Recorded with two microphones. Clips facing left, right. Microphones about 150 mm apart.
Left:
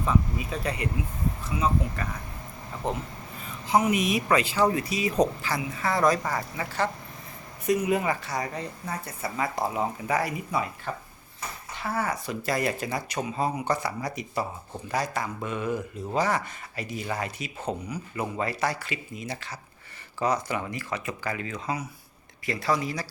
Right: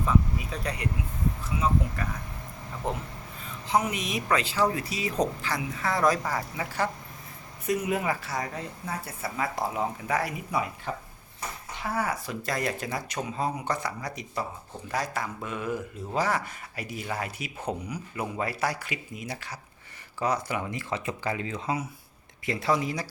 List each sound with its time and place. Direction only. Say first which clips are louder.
0.0 s speech: even; centre (ahead or behind)
10.9 s speech: even; 15° right (ahead or behind)
20.7 s speech: right 1 dB; 25° right (ahead or behind)